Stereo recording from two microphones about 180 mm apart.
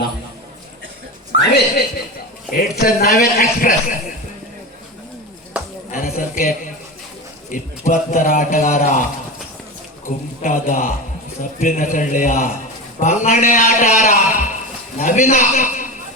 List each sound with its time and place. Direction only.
1.4 s a man's voice: 65° left (ahead or behind)
5.9 s a sound: 50° left (ahead or behind)
7.5 s a man's voice: 45° left (ahead or behind)
10.1 s a man's voice: 50° left (ahead or behind)